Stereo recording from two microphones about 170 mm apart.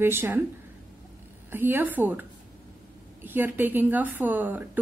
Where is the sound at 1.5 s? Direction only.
10° right (ahead or behind).